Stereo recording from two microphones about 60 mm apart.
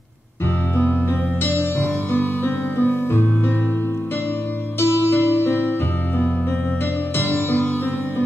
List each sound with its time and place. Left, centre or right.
1.4 s music: left
4.7 s music: left
7.2 s music: left